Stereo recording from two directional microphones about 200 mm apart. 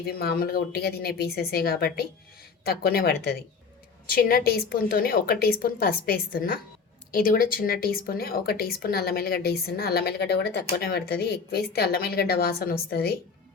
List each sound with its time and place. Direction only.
0.0 s speech: 50° left (ahead or behind)